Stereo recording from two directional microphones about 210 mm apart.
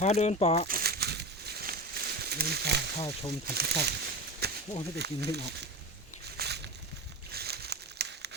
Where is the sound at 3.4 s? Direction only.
50° right (ahead or behind).